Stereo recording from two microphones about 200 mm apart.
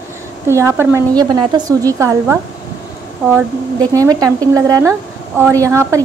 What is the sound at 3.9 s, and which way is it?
A woman's voice, 15° right (ahead or behind).